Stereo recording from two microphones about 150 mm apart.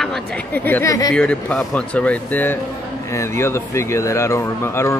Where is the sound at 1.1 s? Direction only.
5° left (ahead or behind).